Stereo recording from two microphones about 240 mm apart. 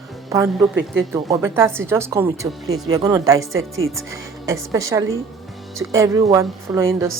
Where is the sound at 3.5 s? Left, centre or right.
Right.